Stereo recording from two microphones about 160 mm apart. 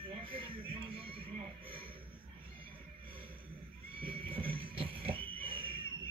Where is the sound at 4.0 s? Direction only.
35° right (ahead or behind).